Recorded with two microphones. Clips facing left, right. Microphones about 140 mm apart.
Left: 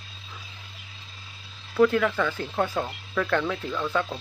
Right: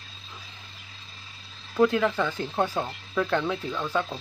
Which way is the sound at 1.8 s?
20° right (ahead or behind).